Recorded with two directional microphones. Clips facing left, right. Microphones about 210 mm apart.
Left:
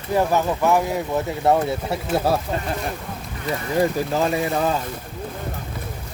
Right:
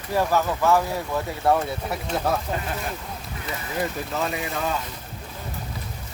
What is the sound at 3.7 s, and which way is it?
Speech, 30° left (ahead or behind).